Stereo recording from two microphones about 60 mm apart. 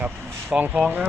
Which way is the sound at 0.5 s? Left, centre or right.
Centre.